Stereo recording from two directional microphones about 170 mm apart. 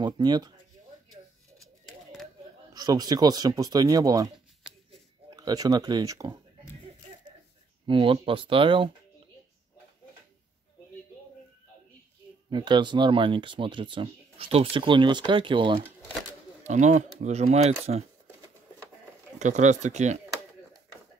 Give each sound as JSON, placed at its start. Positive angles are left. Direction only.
{"t": 0.0, "sound": "speech", "side_deg": -25}
{"t": 2.7, "sound": "speech", "side_deg": -25}
{"t": 5.3, "sound": "speech", "side_deg": -20}
{"t": 7.8, "sound": "speech", "side_deg": -30}
{"t": 12.4, "sound": "speech", "side_deg": -25}
{"t": 16.6, "sound": "speech", "side_deg": -45}
{"t": 19.3, "sound": "speech", "side_deg": -45}